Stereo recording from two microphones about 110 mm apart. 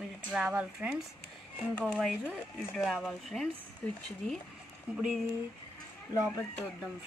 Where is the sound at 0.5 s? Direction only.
15° right (ahead or behind).